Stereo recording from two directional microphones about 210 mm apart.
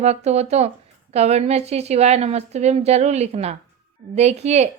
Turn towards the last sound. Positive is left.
turn(degrees=-30)  # may be behind; listen again after turning